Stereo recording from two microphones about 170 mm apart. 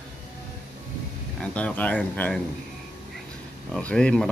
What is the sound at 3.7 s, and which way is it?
Speech, 5° left (ahead or behind).